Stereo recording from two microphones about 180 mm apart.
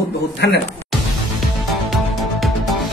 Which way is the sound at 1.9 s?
Centre (ahead or behind).